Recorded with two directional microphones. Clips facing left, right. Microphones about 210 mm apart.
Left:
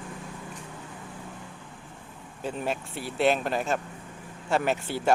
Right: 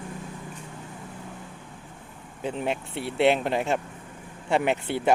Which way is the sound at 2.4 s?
20° right (ahead or behind).